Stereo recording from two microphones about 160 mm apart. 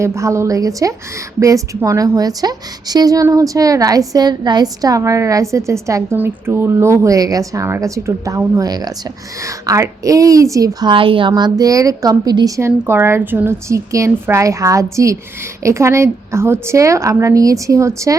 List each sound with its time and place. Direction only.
0.0 s a woman's voice: 20° right (ahead or behind)